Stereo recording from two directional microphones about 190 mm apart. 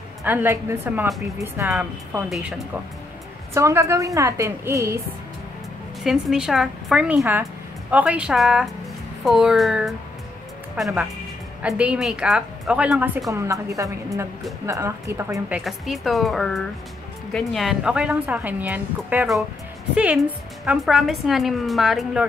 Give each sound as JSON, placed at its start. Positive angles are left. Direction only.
{"t": 0.2, "sound": "a woman's voice", "side_deg": -10}
{"t": 3.5, "sound": "a woman's voice", "side_deg": -15}
{"t": 6.0, "sound": "a woman's voice", "side_deg": -5}
{"t": 15.6, "sound": "a woman's voice", "side_deg": 0}